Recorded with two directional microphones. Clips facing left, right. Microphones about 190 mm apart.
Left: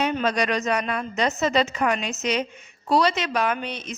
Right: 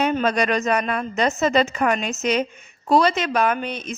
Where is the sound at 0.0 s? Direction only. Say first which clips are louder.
Right 3 dB; 50° right (ahead or behind).